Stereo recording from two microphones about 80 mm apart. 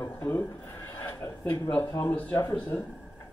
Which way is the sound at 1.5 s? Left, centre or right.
Left.